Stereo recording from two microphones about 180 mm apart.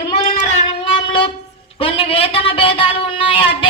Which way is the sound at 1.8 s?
30° left (ahead or behind).